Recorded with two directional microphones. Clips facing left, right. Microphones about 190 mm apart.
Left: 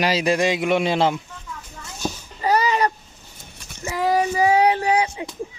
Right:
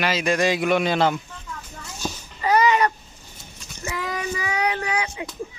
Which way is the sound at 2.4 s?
35° left (ahead or behind).